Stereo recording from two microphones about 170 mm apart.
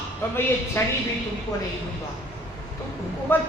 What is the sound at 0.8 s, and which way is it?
Speech, 15° left (ahead or behind).